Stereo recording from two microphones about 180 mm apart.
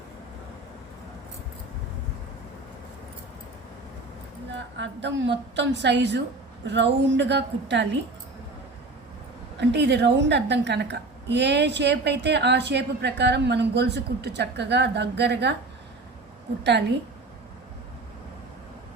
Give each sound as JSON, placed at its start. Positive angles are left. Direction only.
{"t": 4.8, "sound": "a woman's voice", "side_deg": -80}
{"t": 9.6, "sound": "a woman's voice", "side_deg": -70}